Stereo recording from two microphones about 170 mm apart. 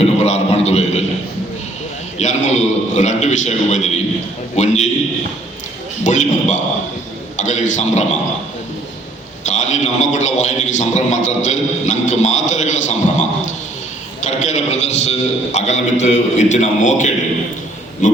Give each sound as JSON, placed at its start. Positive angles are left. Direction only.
{"t": 0.0, "sound": "a sound", "side_deg": 40}
{"t": 2.1, "sound": "a man's voice", "side_deg": 45}
{"t": 6.0, "sound": "a man's voice", "side_deg": 45}
{"t": 9.5, "sound": "a man's voice", "side_deg": 45}